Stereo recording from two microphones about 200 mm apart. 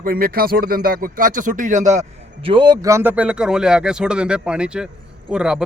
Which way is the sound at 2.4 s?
25° right (ahead or behind).